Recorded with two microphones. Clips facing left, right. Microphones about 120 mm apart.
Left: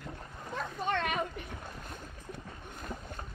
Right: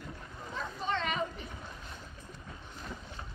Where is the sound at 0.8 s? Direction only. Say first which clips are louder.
Left 1 dB; 55° left (ahead or behind).